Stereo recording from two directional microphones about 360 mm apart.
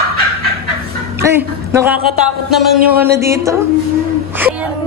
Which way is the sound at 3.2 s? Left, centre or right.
Centre.